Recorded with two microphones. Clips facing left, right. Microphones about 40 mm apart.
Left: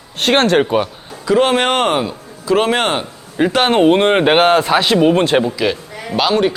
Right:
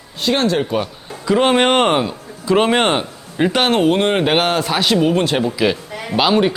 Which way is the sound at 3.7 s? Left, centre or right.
Left.